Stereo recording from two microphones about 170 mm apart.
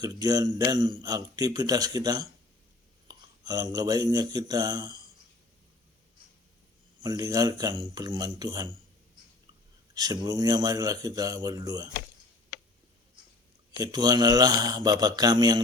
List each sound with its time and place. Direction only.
0.0 s a man's voice: 20° right (ahead or behind)
7.0 s a man's voice: 25° right (ahead or behind)
9.9 s a man's voice: 20° right (ahead or behind)
13.7 s a man's voice: 20° right (ahead or behind)